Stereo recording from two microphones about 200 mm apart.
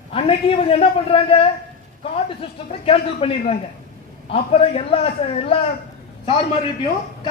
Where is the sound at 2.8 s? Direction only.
25° left (ahead or behind).